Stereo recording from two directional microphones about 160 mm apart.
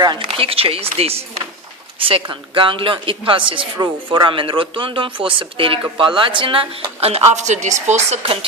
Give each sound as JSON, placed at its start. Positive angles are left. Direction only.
{"t": 0.0, "sound": "speech", "side_deg": -30}